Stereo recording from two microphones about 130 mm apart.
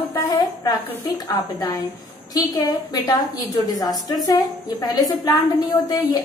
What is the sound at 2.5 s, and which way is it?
A woman's voice, 30° left (ahead or behind).